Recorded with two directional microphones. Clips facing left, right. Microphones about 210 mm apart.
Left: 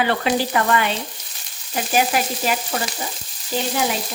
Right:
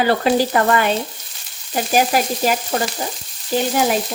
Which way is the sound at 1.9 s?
45° right (ahead or behind).